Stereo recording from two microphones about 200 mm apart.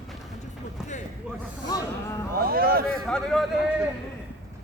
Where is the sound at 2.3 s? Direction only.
50° right (ahead or behind).